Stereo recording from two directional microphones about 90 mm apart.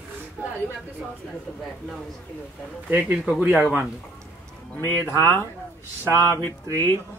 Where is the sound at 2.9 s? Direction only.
20° right (ahead or behind).